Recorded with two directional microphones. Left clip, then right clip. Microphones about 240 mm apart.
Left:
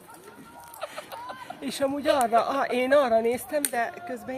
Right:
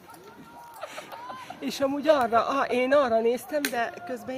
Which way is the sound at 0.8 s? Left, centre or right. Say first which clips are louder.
Left 3 dB; left.